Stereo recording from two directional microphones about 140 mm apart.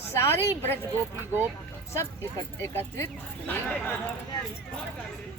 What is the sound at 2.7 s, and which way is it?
Speech, 15° left (ahead or behind).